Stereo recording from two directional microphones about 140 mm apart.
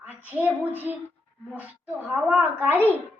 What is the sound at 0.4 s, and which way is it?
A child's voice, 15° right (ahead or behind).